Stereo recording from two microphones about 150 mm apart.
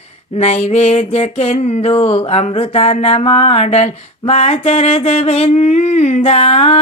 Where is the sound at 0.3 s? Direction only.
45° left (ahead or behind).